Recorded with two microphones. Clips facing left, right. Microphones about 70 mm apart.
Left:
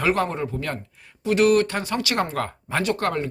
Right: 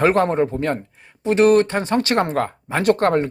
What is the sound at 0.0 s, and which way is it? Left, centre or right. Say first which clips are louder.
Speech: right 6 dB; right.